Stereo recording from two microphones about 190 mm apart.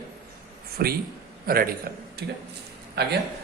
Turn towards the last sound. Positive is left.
turn(degrees=-60)  # may be behind; listen again after turning